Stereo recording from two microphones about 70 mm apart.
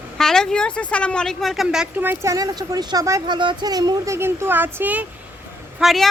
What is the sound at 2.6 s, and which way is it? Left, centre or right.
Speech, right.